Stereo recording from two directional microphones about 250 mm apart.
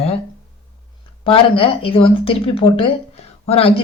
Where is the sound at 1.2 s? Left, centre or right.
Left.